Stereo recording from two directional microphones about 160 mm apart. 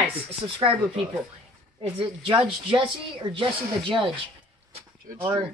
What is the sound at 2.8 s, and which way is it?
A woman's voice, 35° right (ahead or behind).